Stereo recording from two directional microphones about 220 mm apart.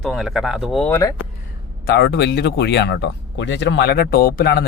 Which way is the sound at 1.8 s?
45° left (ahead or behind).